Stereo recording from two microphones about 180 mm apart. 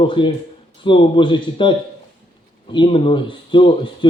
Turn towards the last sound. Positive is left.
turn(degrees=25)  # may be behind; listen again after turning